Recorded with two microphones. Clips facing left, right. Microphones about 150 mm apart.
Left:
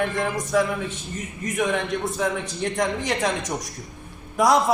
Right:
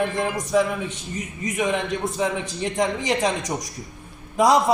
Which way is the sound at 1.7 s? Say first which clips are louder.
Right 1 dB; 20° right (ahead or behind).